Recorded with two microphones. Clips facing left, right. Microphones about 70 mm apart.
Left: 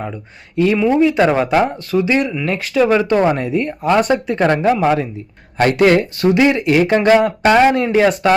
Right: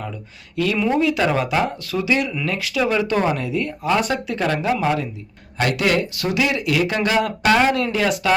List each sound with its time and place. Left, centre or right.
0.5 s speech: left
1.2 s speech: left
7.3 s speech: left